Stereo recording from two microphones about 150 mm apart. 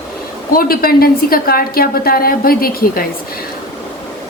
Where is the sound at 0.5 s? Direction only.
80° left.